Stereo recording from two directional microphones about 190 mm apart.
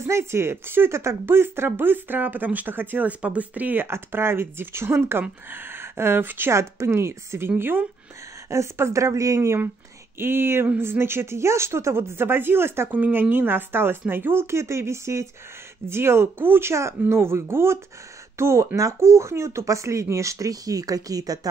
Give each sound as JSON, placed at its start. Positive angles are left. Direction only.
{"t": 0.0, "sound": "speech", "side_deg": -15}